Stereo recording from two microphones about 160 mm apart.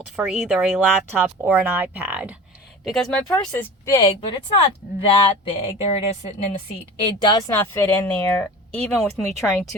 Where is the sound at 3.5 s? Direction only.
15° left (ahead or behind).